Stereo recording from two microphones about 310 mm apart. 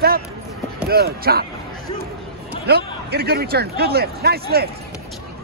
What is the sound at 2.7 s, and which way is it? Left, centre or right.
Speech, right.